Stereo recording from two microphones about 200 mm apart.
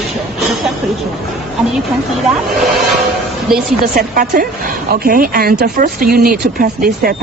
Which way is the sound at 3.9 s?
45° right (ahead or behind).